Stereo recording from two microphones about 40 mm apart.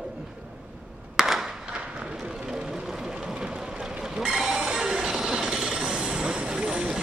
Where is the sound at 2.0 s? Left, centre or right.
Centre.